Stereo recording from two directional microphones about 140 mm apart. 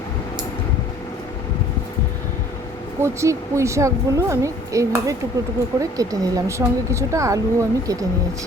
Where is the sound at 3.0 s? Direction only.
20° right (ahead or behind).